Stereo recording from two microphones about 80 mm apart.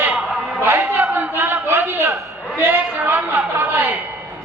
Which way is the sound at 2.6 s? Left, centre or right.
Right.